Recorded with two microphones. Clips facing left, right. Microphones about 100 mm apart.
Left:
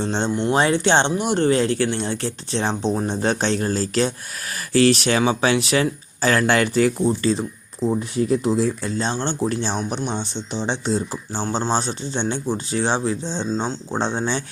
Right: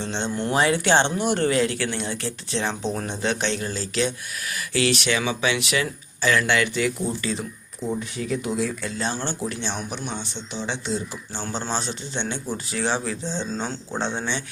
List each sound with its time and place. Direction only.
0.0 s speech: 35° left (ahead or behind)
0.3 s speech: 20° left (ahead or behind)
1.5 s speech: 35° left (ahead or behind)
3.2 s speech: 40° left (ahead or behind)
9.5 s speech: 35° left (ahead or behind)